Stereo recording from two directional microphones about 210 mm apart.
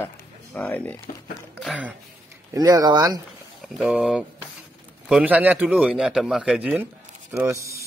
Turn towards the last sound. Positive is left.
turn(degrees=-15)  # may be behind; listen again after turning